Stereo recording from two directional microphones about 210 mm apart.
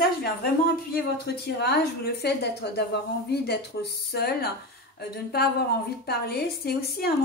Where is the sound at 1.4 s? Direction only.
50° left (ahead or behind).